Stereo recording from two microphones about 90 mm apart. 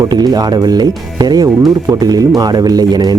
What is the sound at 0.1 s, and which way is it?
Speech, 50° right (ahead or behind).